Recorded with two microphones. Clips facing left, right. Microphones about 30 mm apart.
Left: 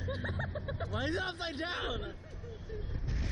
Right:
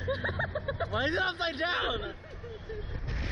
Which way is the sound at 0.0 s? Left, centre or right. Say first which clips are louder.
Right 7 dB; right.